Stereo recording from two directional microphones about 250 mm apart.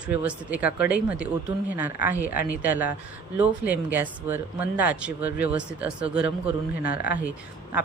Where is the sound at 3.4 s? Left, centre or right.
Centre.